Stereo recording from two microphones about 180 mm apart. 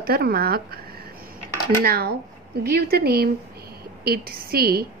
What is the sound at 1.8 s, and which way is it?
A woman's voice, 60° right (ahead or behind).